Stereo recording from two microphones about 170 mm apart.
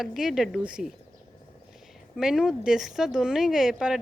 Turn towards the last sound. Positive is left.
turn(degrees=-5)  # may be behind; listen again after turning